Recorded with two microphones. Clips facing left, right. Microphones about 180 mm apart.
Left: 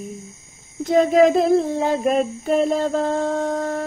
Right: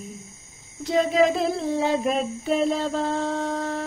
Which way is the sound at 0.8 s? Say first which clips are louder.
Left 5 dB; 50° left (ahead or behind).